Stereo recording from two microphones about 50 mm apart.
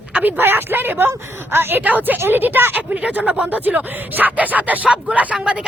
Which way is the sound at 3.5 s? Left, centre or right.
Right.